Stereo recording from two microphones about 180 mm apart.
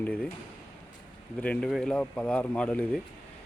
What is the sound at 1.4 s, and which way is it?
Speech, 5° left (ahead or behind).